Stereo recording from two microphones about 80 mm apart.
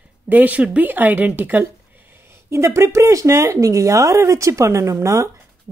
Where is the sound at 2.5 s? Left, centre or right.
Right.